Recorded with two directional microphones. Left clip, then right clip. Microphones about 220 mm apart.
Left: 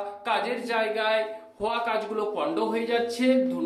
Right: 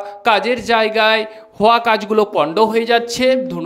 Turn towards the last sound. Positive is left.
turn(degrees=-50)  # may be behind; listen again after turning